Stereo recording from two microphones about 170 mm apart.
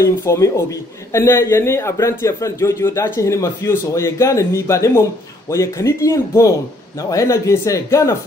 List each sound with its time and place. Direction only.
0.0 s a man's voice: 15° left (ahead or behind)